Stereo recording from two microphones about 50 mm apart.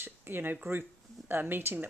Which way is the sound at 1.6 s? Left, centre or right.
Right.